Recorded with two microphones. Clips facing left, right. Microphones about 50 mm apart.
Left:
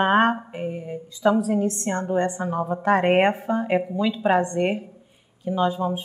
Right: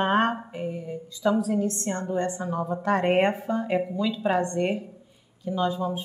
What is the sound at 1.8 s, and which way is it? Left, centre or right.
A woman's voice, left.